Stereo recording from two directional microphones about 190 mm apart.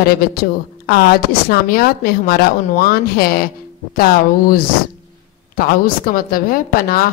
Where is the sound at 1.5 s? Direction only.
50° left (ahead or behind).